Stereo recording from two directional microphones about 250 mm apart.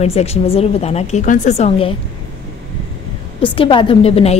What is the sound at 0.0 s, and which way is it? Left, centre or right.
A woman's voice, left.